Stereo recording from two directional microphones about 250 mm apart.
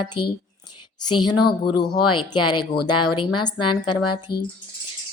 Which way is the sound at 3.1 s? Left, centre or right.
Centre.